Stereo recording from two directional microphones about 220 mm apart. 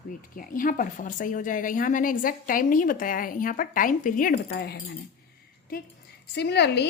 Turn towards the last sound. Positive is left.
turn(degrees=50)  # may be behind; listen again after turning